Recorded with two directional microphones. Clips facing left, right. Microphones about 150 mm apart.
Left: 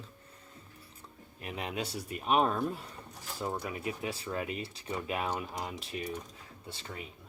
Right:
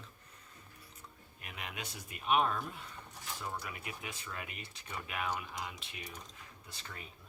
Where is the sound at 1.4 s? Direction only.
35° left (ahead or behind).